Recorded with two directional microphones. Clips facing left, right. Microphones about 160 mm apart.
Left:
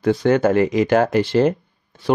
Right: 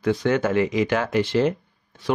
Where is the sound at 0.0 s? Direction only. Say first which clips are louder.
Left 5 dB; 35° left (ahead or behind).